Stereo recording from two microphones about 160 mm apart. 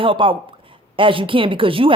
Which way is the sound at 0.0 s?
30° right (ahead or behind).